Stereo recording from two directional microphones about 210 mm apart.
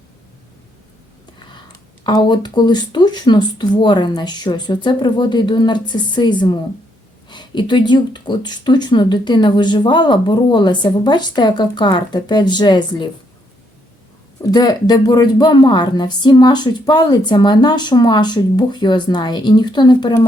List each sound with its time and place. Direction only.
2.0 s speech: 20° left (ahead or behind)
14.5 s speech: 20° left (ahead or behind)